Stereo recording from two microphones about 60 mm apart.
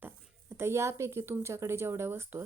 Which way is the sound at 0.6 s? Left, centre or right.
Right.